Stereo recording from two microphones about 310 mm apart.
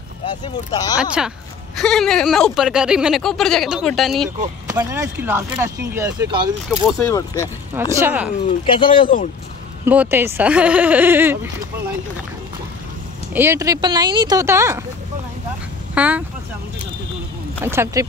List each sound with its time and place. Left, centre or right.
0.2 s speech: centre
1.8 s speech: centre
4.6 s speech: centre
6.9 s speech: centre
7.9 s speech: centre
8.5 s speech: centre
9.8 s speech: centre
13.3 s speech: centre
15.9 s speech: centre
17.6 s speech: centre